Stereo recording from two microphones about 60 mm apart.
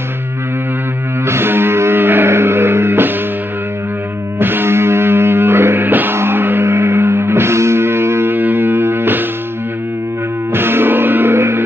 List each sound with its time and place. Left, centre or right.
1.2 s music: right
4.4 s music: right
10.5 s music: right